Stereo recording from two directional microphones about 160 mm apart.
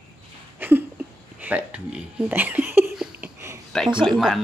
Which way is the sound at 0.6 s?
15° right (ahead or behind).